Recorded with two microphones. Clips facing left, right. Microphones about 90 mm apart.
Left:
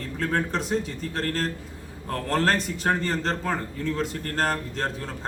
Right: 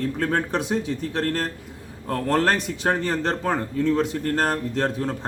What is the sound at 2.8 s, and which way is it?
Speech, 15° right (ahead or behind).